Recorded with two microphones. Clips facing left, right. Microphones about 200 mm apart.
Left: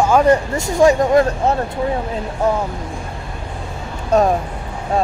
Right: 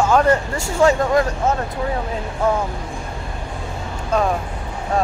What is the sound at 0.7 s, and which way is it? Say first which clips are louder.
Speech: left 3 dB; 15° left (ahead or behind).